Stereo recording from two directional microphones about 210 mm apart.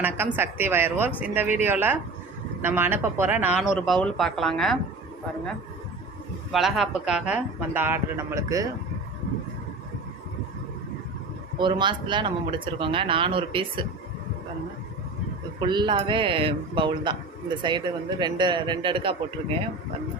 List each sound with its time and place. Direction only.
0.0 s speech: 10° right (ahead or behind)
6.5 s speech: centre (ahead or behind)
11.6 s a man's voice: 20° right (ahead or behind)
15.6 s a man's voice: 20° right (ahead or behind)